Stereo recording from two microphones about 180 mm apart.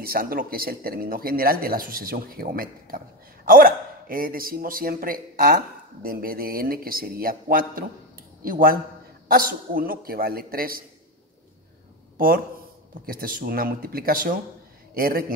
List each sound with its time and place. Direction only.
0.0 s a man's voice: 55° right (ahead or behind)
13.0 s a man's voice: 55° right (ahead or behind)